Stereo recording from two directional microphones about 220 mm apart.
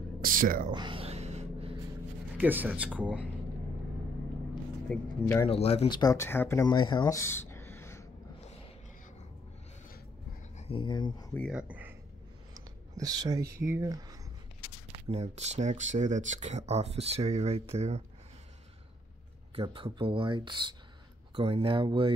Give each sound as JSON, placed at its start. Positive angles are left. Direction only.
{"t": 0.2, "sound": "speech", "side_deg": -40}
{"t": 0.7, "sound": "a sound", "side_deg": -20}
{"t": 2.3, "sound": "speech", "side_deg": -10}
{"t": 4.8, "sound": "speech", "side_deg": 5}
{"t": 5.5, "sound": "speech", "side_deg": 25}
{"t": 10.6, "sound": "speech", "side_deg": 25}
{"t": 11.3, "sound": "speech", "side_deg": 0}
{"t": 12.5, "sound": "speech", "side_deg": -15}
{"t": 14.9, "sound": "speech", "side_deg": -25}
{"t": 19.5, "sound": "speech", "side_deg": -25}